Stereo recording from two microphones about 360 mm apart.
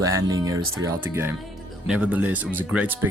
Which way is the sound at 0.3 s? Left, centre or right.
Centre.